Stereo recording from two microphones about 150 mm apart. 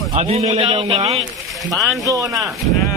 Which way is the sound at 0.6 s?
30° right (ahead or behind).